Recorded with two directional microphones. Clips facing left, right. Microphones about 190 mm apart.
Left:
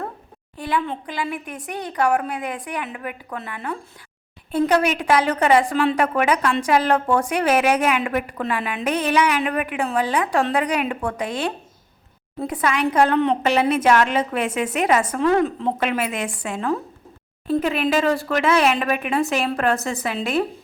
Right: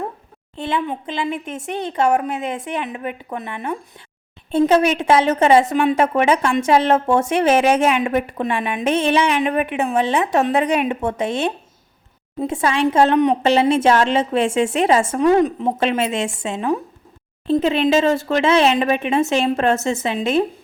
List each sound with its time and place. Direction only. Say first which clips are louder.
0.5 s a woman's voice: right 2 dB; 25° right (ahead or behind)